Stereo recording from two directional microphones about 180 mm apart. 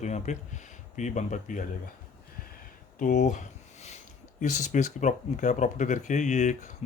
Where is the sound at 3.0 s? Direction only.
45° left (ahead or behind).